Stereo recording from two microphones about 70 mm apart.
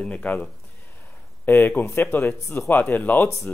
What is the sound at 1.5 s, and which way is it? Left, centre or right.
Speech, left.